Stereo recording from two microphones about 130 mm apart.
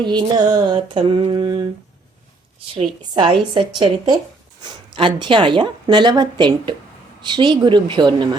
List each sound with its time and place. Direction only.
0.0 s speech: 35° right (ahead or behind)
2.7 s speech: 40° right (ahead or behind)